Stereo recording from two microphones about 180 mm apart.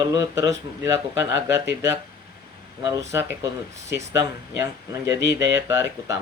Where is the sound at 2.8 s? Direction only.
20° right (ahead or behind).